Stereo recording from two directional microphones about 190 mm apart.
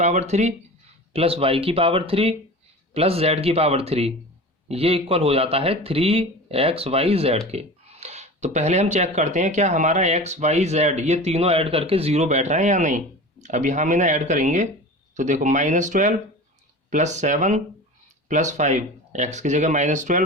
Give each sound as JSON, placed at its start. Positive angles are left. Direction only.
{"t": 0.0, "sound": "speech", "side_deg": -35}